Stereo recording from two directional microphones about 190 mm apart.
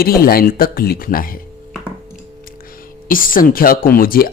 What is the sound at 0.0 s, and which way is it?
Speech, 50° left (ahead or behind).